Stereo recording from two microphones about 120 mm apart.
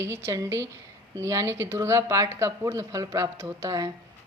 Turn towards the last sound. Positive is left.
turn(degrees=-25)  # may be behind; listen again after turning